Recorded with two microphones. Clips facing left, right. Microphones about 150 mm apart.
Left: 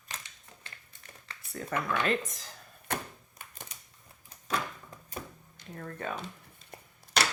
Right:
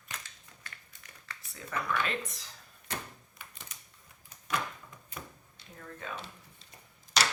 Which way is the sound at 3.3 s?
50° left (ahead or behind).